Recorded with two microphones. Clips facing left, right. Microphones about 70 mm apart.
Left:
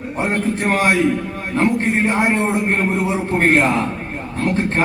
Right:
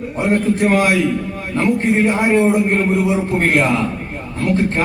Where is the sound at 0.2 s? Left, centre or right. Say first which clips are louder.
Right 4 dB; left.